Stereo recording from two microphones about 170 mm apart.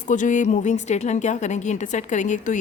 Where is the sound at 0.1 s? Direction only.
50° left (ahead or behind).